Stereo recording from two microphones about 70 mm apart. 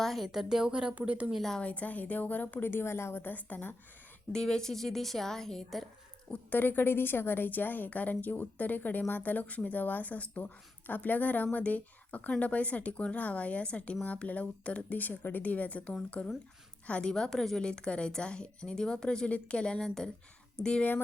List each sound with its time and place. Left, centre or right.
0.0 s a woman's voice: centre
1.3 s a woman's voice: centre
1.5 s speech: centre
4.3 s a woman's voice: centre
6.3 s a woman's voice: left
17.1 s a woman's voice: centre